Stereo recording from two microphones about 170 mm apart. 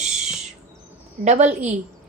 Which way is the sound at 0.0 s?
45° right (ahead or behind).